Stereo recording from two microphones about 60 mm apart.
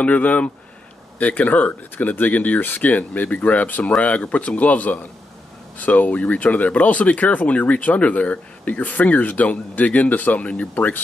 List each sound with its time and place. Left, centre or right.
0.0 s speech: left